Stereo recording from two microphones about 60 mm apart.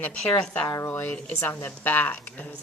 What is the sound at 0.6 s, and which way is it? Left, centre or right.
Speech, left.